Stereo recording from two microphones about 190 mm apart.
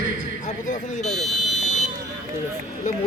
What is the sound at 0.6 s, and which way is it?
Speech, 40° left (ahead or behind).